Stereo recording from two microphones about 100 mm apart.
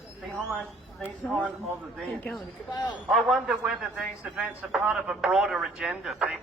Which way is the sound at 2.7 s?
45° left (ahead or behind).